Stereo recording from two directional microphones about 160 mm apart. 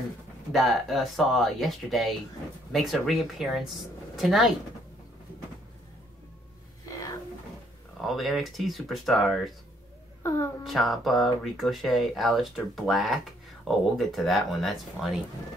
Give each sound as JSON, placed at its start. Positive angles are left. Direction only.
{"t": 0.5, "sound": "speech", "side_deg": 0}
{"t": 8.0, "sound": "speech", "side_deg": 0}
{"t": 10.2, "sound": "a woman's voice", "side_deg": 15}
{"t": 10.6, "sound": "speech", "side_deg": 0}